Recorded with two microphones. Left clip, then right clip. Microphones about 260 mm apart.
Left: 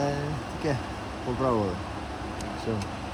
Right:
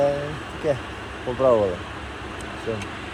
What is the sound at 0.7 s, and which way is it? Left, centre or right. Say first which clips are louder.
Vehicle: right 2 dB; left.